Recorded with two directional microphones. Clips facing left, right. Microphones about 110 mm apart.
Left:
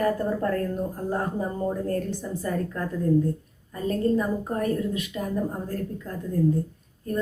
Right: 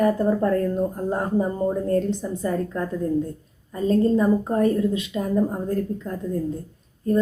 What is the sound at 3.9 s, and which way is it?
A woman's voice, 25° right (ahead or behind).